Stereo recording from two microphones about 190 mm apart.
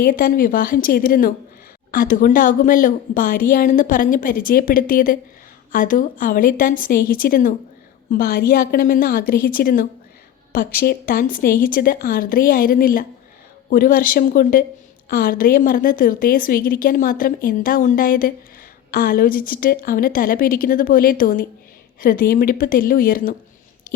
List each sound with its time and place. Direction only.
0.0 s a woman's voice: 50° left (ahead or behind)